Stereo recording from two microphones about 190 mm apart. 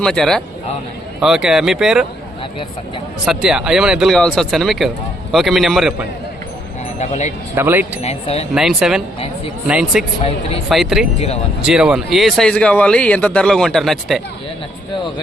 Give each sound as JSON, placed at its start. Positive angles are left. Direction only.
{"t": 0.0, "sound": "speech", "side_deg": 5}
{"t": 3.2, "sound": "speech", "side_deg": -5}
{"t": 7.0, "sound": "speech", "side_deg": 40}
{"t": 7.5, "sound": "speech", "side_deg": -10}
{"t": 8.0, "sound": "speech", "side_deg": 35}
{"t": 8.5, "sound": "speech", "side_deg": -5}